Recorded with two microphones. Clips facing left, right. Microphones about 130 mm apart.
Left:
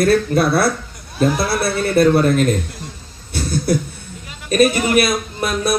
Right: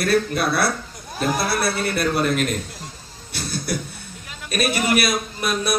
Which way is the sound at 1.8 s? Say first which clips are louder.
Left 8 dB; 25° left (ahead or behind).